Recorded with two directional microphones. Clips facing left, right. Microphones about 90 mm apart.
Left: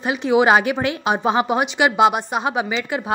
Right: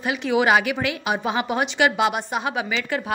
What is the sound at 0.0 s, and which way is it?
Speech, 25° left (ahead or behind).